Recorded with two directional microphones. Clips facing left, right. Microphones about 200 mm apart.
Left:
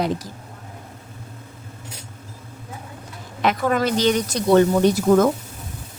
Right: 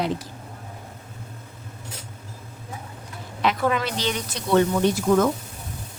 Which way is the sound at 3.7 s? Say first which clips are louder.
Left 7 dB; 45° left (ahead or behind).